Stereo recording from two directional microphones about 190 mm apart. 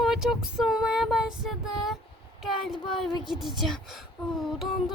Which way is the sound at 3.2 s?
Centre (ahead or behind).